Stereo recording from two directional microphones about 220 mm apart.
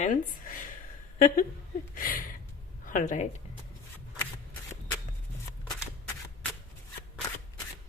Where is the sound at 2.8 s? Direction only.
35° left (ahead or behind).